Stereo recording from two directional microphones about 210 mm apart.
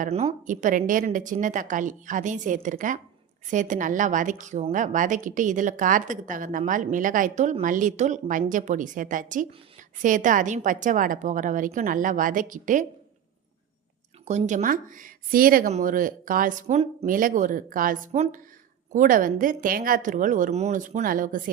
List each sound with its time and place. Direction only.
0.0 s a woman's voice: 30° right (ahead or behind)
14.3 s a woman's voice: 35° right (ahead or behind)